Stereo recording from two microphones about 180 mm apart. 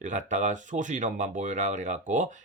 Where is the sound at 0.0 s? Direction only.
45° right (ahead or behind).